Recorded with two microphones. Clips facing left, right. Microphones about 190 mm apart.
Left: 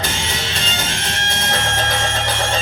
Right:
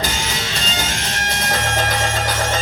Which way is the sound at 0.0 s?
25° left (ahead or behind).